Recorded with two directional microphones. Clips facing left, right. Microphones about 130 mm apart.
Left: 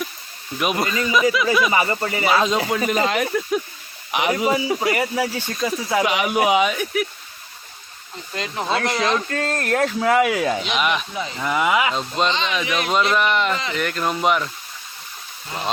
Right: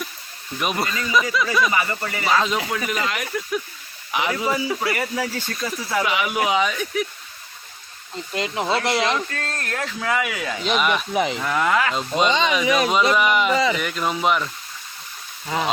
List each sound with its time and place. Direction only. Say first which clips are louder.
0.6 s speech: left 3 dB; 5° left (ahead or behind)
1.7 s speech: left 3 dB; 25° left (ahead or behind)
4.1 s speech: left 3 dB; 20° left (ahead or behind)
8.1 s speech: right 3 dB; 20° right (ahead or behind)
9.5 s speech: left 8 dB; 45° left (ahead or behind)
10.8 s speech: right 3 dB; centre (ahead or behind)
11.1 s speech: right 7 dB; 70° right (ahead or behind)
11.3 s speech: left 1 dB; 5° left (ahead or behind)
11.9 s speech: right 2 dB; 5° right (ahead or behind)